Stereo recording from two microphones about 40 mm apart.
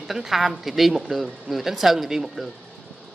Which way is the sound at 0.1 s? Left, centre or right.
Centre.